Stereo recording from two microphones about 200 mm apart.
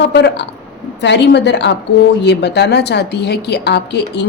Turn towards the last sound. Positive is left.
turn(degrees=60)  # may be behind; listen again after turning